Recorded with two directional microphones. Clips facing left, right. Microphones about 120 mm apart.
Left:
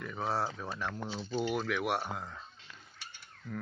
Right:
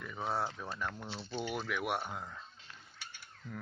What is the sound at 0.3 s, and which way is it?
Speech, 5° left (ahead or behind).